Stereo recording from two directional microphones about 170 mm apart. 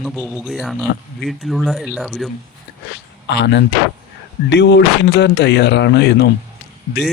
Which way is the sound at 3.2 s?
90° left.